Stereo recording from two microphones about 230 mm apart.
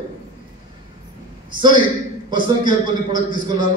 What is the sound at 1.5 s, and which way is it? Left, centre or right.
A man's voice, centre.